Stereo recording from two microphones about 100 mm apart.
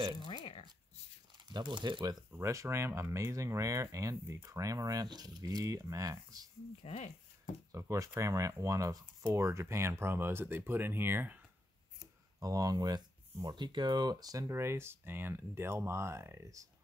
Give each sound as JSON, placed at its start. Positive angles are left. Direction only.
{"t": 1.5, "sound": "speech", "side_deg": -50}
{"t": 2.4, "sound": "speech", "side_deg": -30}
{"t": 6.8, "sound": "speech", "side_deg": 85}
{"t": 7.7, "sound": "speech", "side_deg": -30}
{"t": 12.4, "sound": "speech", "side_deg": -35}
{"t": 14.5, "sound": "speech", "side_deg": -25}